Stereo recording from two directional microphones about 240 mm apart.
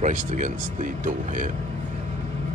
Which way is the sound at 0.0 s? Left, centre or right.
Right.